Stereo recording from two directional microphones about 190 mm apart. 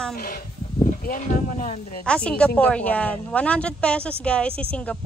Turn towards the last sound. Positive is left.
turn(degrees=5)  # may be behind; listen again after turning